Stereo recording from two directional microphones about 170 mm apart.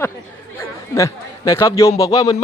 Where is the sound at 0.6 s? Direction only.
20° left (ahead or behind).